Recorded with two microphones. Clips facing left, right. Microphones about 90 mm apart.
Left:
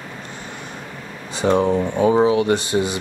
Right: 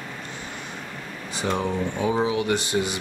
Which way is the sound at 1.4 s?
30° left (ahead or behind).